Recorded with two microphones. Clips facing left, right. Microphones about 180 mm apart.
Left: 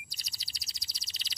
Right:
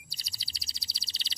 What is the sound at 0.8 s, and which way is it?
Bird vocalization, 30° right (ahead or behind).